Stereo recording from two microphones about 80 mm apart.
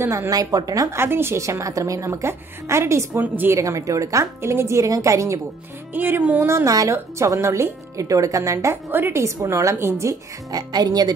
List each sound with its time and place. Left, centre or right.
0.0 s a woman's voice: right
0.3 s a woman's voice: right
0.9 s a woman's voice: right
3.2 s speech: right
3.5 s a woman's voice: right
5.9 s speech: right
6.4 s a woman's voice: right
8.9 s speech: right
9.2 s a woman's voice: right
10.5 s speech: right